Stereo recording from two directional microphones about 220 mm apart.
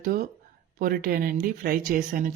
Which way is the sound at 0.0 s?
40° right (ahead or behind).